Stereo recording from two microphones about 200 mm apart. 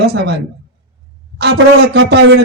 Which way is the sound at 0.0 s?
55° right (ahead or behind).